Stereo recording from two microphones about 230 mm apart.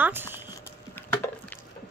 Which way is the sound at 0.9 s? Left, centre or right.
Centre.